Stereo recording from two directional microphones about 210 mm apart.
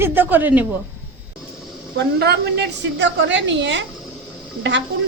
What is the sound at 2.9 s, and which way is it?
A woman's voice, 60° right (ahead or behind).